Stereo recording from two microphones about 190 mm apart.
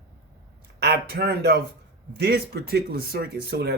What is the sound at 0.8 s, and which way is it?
Speech, 55° right (ahead or behind).